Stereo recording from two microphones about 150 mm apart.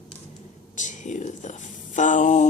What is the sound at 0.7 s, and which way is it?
Speech, 55° left (ahead or behind).